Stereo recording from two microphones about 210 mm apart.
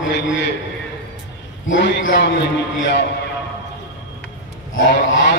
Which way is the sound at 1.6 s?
60° left (ahead or behind).